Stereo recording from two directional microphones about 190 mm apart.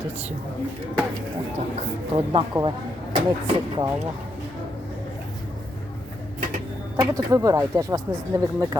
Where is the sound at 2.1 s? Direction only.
25° right (ahead or behind).